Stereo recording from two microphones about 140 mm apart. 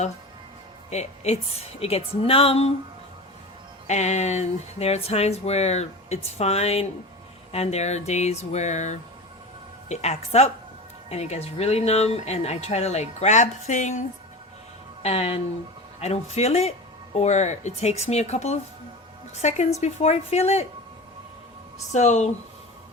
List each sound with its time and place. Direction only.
0.9 s speech: 50° left (ahead or behind)
3.8 s speech: 55° left (ahead or behind)
15.0 s speech: 45° left (ahead or behind)
21.9 s speech: 55° left (ahead or behind)